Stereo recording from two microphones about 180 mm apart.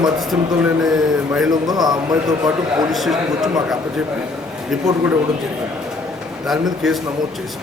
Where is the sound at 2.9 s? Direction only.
Centre (ahead or behind).